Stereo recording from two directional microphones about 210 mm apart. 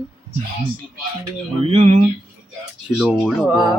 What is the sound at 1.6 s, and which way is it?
Speech, 30° right (ahead or behind).